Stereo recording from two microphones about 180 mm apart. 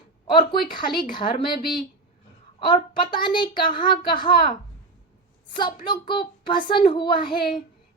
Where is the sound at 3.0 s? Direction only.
25° left (ahead or behind).